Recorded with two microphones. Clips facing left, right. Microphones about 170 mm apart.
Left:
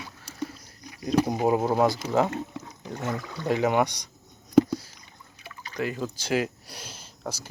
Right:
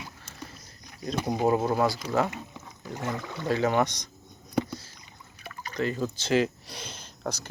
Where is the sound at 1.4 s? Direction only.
15° left (ahead or behind).